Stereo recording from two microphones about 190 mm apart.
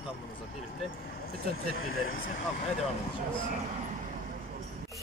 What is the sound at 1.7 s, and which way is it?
Speech, 90° left.